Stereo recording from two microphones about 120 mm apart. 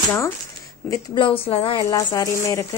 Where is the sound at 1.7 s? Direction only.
30° left (ahead or behind).